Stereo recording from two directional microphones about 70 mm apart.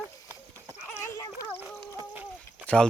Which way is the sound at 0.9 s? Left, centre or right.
Left.